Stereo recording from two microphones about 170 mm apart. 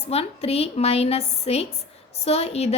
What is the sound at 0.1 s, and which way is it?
A woman's voice, 35° left (ahead or behind).